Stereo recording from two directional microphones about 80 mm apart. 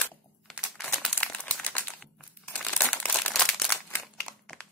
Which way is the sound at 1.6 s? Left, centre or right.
Centre.